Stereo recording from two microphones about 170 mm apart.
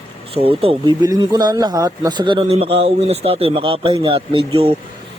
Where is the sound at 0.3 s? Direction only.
35° right (ahead or behind).